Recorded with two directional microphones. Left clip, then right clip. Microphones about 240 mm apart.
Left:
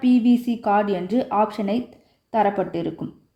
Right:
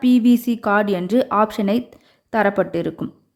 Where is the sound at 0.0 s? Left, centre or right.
Centre.